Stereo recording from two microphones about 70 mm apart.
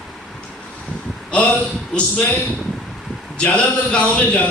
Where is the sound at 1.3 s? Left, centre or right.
Centre.